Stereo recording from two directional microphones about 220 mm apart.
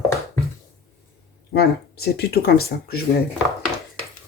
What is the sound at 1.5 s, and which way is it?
Speech, 45° left (ahead or behind).